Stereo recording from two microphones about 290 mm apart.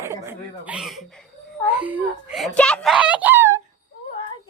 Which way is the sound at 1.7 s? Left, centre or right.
Centre.